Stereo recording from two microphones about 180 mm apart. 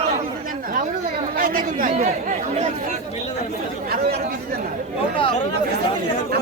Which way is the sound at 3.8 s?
60° right (ahead or behind).